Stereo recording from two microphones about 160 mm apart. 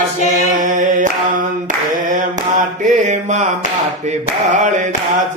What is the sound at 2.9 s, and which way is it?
Mantra, 50° right (ahead or behind).